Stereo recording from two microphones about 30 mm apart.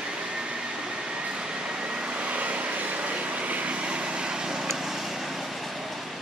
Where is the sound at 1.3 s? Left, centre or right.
Right.